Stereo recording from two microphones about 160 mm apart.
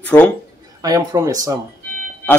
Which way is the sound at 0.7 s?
20° right (ahead or behind).